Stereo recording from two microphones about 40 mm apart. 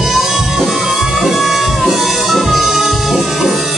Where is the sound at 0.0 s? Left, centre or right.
Centre.